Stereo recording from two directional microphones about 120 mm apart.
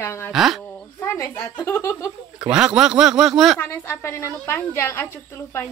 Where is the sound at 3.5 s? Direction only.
20° left (ahead or behind).